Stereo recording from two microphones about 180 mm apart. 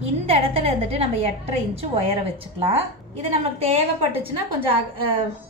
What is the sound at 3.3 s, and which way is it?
A woman's voice, 35° right (ahead or behind).